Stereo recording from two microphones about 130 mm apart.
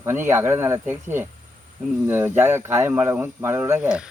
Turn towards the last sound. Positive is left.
turn(degrees=-20)  # may be behind; listen again after turning